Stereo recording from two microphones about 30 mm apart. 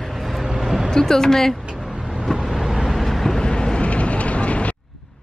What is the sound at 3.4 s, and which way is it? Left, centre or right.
Vehicle, left.